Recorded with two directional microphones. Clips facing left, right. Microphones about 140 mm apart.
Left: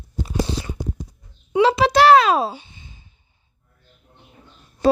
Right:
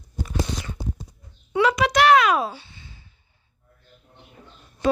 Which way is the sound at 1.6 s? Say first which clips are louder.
Left 4 dB; 30° left (ahead or behind).